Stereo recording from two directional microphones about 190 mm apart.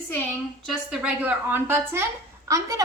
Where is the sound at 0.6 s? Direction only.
Centre (ahead or behind).